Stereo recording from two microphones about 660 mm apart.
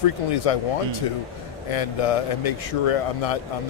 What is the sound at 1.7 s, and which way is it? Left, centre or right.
Speech, left.